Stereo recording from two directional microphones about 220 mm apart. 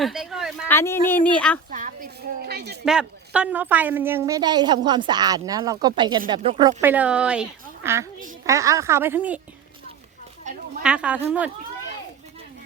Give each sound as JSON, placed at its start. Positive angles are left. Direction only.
{"t": 0.0, "sound": "a sound", "side_deg": 0}
{"t": 0.7, "sound": "speech", "side_deg": 10}
{"t": 1.7, "sound": "a sound", "side_deg": -35}
{"t": 2.8, "sound": "a woman's voice", "side_deg": -5}
{"t": 6.8, "sound": "speech", "side_deg": -5}
{"t": 8.4, "sound": "a woman's voice", "side_deg": -15}
{"t": 10.8, "sound": "a woman's voice", "side_deg": -5}